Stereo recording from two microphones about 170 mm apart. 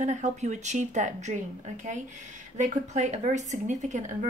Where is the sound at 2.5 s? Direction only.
45° right (ahead or behind).